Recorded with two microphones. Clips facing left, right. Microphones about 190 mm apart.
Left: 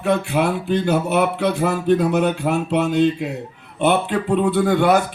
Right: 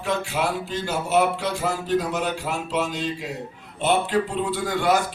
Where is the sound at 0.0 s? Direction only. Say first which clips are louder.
Left 6 dB; 60° left (ahead or behind).